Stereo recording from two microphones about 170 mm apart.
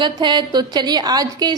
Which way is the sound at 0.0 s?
25° right (ahead or behind).